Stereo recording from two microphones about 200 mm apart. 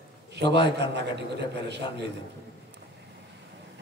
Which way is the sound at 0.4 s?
60° right (ahead or behind).